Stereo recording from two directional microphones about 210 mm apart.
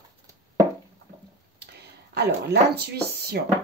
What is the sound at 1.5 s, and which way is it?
Speech, 50° right (ahead or behind).